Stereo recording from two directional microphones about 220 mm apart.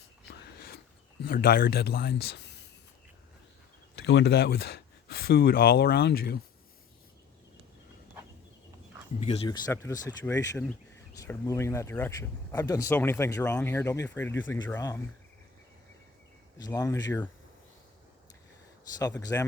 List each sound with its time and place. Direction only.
1.2 s a man's voice: 45° left (ahead or behind)
3.9 s speech: 50° left (ahead or behind)
9.5 s speech: 15° left (ahead or behind)
16.6 s speech: 15° left (ahead or behind)
18.9 s speech: 15° left (ahead or behind)